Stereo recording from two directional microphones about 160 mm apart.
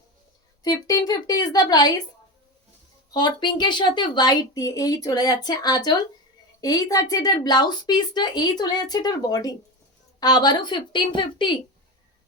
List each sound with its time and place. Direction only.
0.6 s speech: 25° left (ahead or behind)
3.1 s speech: 25° left (ahead or behind)